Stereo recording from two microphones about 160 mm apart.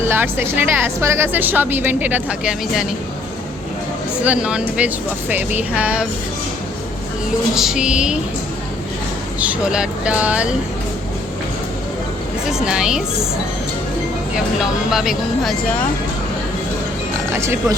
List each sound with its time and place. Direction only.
0.1 s a woman's voice: 15° right (ahead or behind)
4.2 s a woman's voice: 5° right (ahead or behind)
7.5 s speech: 5° right (ahead or behind)
9.4 s a woman's voice: 5° right (ahead or behind)
12.6 s speech: 5° right (ahead or behind)
14.3 s speech: 5° right (ahead or behind)
17.3 s a woman's voice: 15° right (ahead or behind)